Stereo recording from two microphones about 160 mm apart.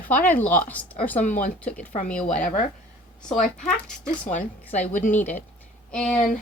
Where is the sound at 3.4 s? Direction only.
55° left (ahead or behind).